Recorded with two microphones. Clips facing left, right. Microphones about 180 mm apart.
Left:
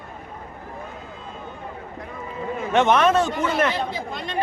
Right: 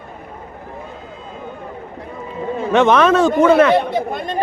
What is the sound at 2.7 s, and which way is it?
Speech, 90° right.